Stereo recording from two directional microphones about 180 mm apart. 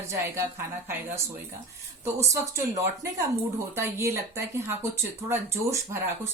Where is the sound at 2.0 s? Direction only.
15° right (ahead or behind).